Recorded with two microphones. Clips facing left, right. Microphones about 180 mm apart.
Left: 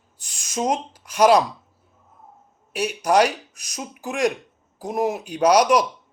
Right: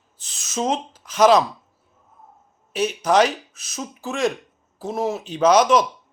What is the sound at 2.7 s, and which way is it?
A man's voice, 10° left (ahead or behind).